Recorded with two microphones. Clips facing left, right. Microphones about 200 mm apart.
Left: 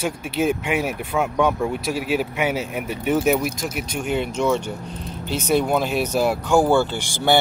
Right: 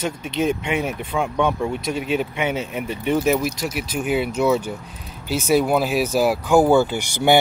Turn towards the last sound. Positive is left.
turn(degrees=-10)  # may be behind; listen again after turning